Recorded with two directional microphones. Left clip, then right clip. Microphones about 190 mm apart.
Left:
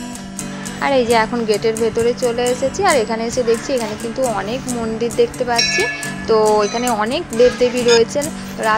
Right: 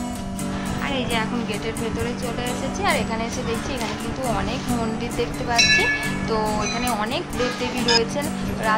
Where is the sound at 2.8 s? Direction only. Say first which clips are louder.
Left 6 dB; 20° left (ahead or behind).